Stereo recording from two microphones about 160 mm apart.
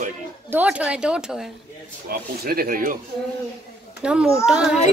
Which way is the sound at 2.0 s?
70° right (ahead or behind).